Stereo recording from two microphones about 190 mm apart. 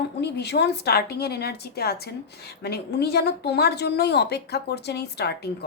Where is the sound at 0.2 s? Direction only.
60° left (ahead or behind).